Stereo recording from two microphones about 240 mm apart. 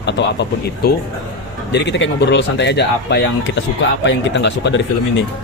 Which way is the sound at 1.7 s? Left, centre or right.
Left.